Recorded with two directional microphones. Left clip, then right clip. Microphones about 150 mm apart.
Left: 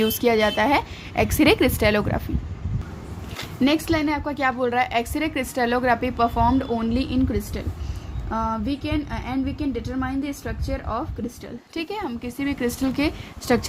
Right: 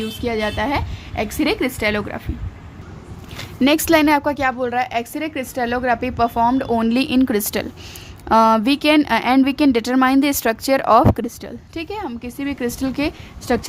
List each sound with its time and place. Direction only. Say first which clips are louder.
0.2 s a woman's voice: even; 25° left (ahead or behind)
3.6 s a woman's voice: right 7 dB; 45° right (ahead or behind)
4.4 s a woman's voice: right 2 dB; 20° right (ahead or behind)
6.7 s a woman's voice: right 6 dB; 40° right (ahead or behind); by 11.0 s 60° right (ahead or behind)
11.7 s a woman's voice: right 1 dB; 25° right (ahead or behind)